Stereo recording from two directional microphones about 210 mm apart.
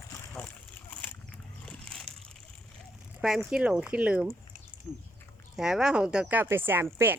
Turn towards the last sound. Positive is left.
turn(degrees=-10)  # may be behind; listen again after turning